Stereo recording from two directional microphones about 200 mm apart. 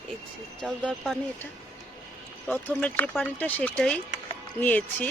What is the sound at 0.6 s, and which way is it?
Speech, centre (ahead or behind).